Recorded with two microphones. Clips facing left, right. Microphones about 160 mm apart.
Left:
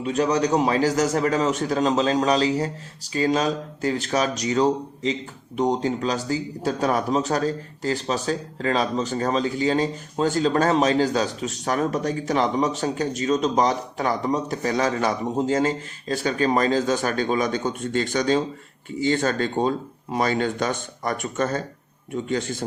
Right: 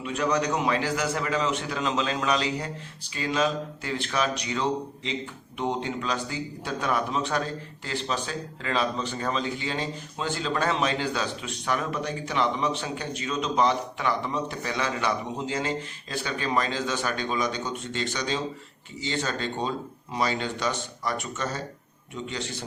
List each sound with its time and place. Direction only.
0.0 s speech: 40° left (ahead or behind)